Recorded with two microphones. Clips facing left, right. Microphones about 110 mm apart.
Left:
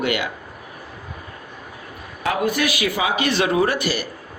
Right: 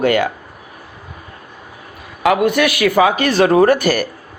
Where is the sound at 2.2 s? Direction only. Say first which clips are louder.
Right 7 dB; 80° right; by 4.1 s 50° right (ahead or behind).